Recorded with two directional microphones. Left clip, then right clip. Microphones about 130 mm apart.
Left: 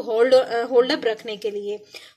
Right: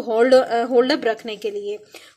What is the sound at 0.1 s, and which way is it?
A woman's voice, 25° right (ahead or behind).